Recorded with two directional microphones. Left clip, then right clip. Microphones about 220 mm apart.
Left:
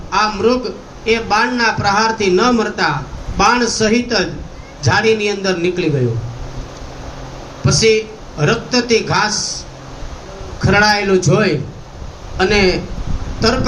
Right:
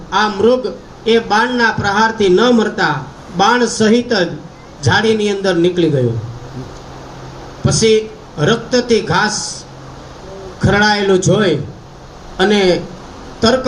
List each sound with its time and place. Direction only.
0.1 s a man's voice: 40° right (ahead or behind)
7.6 s speech: 40° right (ahead or behind)
10.6 s a man's voice: 40° right (ahead or behind)